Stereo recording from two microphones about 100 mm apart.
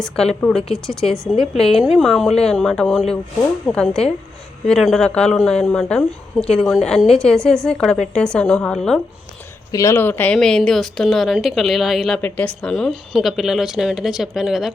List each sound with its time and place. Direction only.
0.4 s speech: 5° left (ahead or behind)
8.7 s speech: 5° left (ahead or behind)
9.7 s speech: 30° left (ahead or behind)
10.3 s speech: 5° left (ahead or behind)
12.2 s speech: 10° left (ahead or behind)